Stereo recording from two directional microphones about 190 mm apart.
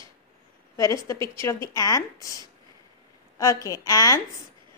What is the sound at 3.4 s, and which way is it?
Speech, 20° left (ahead or behind).